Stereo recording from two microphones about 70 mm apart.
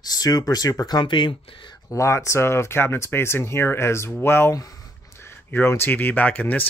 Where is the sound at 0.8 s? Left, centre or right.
Left.